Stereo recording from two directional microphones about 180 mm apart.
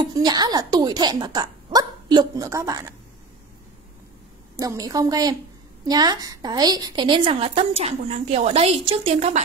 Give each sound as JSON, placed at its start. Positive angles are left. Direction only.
{"t": 0.0, "sound": "a woman's voice", "side_deg": -25}
{"t": 4.6, "sound": "a woman's voice", "side_deg": -20}